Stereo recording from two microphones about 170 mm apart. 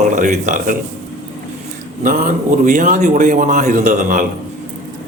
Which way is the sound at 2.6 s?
50° right (ahead or behind).